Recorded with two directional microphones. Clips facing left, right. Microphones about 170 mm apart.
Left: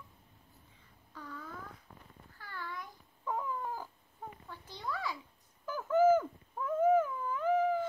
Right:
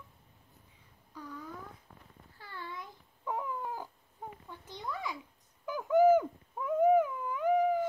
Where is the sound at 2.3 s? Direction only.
25° right (ahead or behind).